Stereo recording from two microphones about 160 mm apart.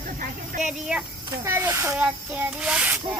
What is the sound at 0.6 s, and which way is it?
Speech, 5° right (ahead or behind).